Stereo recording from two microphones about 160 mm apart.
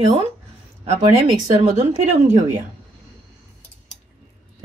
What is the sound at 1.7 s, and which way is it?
Speech, 45° right (ahead or behind).